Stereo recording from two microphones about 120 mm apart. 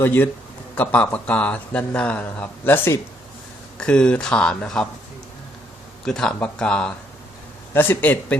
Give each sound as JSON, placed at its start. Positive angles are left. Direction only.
{"t": 0.0, "sound": "speech", "side_deg": 20}
{"t": 3.8, "sound": "speech", "side_deg": 5}
{"t": 6.1, "sound": "speech", "side_deg": 5}